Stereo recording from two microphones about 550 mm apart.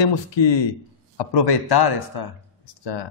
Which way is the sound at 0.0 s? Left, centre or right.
Left.